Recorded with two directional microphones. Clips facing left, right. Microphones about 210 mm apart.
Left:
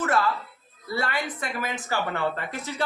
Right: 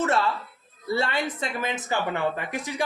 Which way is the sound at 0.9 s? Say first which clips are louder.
Right 3 dB; 25° right (ahead or behind).